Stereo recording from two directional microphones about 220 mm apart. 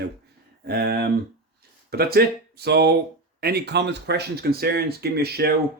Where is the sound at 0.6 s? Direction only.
45° right (ahead or behind).